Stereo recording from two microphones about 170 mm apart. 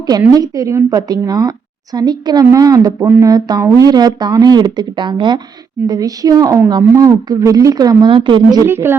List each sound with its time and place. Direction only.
0.3 s a woman's voice: 20° right (ahead or behind)